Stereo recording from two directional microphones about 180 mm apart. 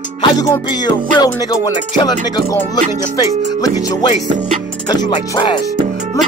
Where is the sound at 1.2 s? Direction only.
20° left (ahead or behind).